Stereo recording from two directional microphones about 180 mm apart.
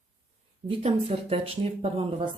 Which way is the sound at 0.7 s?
30° right (ahead or behind).